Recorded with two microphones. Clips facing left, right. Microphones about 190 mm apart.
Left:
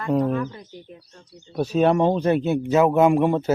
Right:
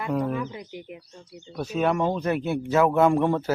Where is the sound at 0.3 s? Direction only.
10° right (ahead or behind).